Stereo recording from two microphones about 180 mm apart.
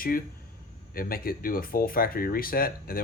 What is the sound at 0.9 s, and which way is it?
Speech, 55° left (ahead or behind).